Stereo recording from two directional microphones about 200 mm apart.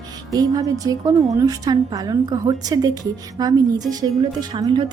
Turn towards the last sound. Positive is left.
turn(degrees=-25)  # may be behind; listen again after turning